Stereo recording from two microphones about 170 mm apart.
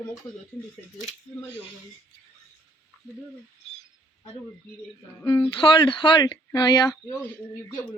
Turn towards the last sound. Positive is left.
turn(degrees=25)  # may be behind; listen again after turning